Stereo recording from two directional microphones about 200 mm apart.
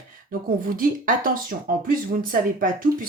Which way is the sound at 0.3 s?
45° right (ahead or behind).